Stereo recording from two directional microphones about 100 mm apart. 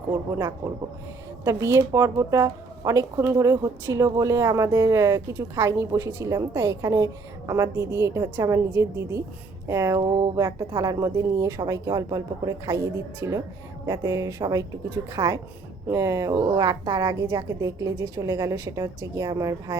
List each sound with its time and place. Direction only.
1.5 s a woman's voice: 30° right (ahead or behind)
10.0 s speech: 50° right (ahead or behind)
10.3 s speech: 35° right (ahead or behind)